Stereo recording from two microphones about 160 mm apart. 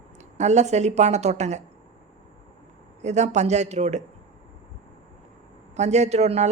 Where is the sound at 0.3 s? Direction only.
45° right (ahead or behind).